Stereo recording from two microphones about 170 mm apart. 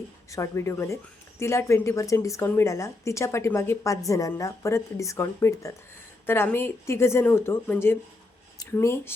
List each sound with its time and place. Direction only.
0.3 s speech: 20° left (ahead or behind)